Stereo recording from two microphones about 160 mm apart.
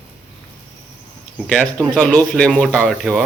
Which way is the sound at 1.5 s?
5° left (ahead or behind).